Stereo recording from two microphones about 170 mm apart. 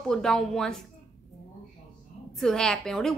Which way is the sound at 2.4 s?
5° left (ahead or behind).